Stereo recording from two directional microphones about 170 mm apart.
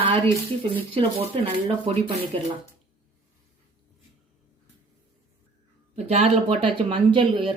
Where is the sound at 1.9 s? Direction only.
35° right (ahead or behind).